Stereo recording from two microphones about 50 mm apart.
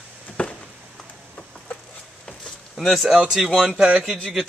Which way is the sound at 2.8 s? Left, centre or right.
Centre.